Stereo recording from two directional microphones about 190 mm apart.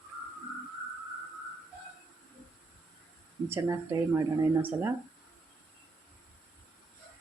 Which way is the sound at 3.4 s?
15° right (ahead or behind).